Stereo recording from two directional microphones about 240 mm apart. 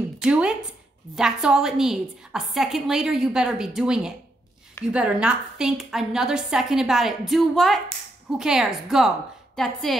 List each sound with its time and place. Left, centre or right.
0.2 s a woman's voice: centre